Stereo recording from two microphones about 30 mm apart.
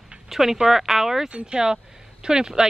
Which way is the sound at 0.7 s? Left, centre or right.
Centre.